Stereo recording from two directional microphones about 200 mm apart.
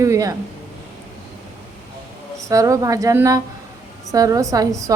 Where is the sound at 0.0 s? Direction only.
15° right (ahead or behind).